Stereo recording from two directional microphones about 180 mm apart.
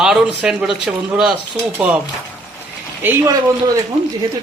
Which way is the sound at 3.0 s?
20° right (ahead or behind).